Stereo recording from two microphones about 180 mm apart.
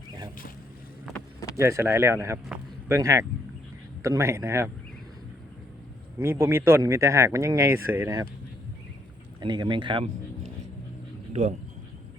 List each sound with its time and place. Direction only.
1.5 s speech: 15° right (ahead or behind)
6.1 s speech: 15° right (ahead or behind)
9.4 s speech: 25° right (ahead or behind)